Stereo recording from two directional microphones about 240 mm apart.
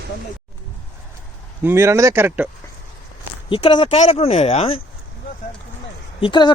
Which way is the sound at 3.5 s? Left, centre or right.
Left.